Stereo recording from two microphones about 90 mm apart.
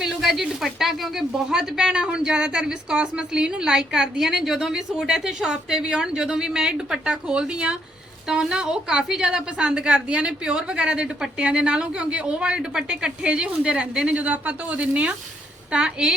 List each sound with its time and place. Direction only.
0.0 s speech: 5° right (ahead or behind)